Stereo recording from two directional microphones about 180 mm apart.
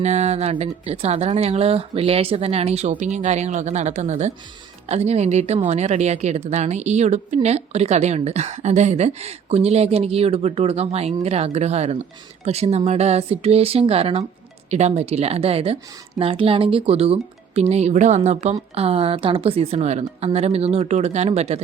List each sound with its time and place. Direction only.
0.0 s a woman's voice: 40° right (ahead or behind)